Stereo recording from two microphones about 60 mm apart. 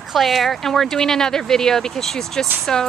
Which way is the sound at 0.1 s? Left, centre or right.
Centre.